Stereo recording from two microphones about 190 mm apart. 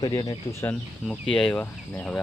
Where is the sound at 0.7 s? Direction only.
5° left (ahead or behind).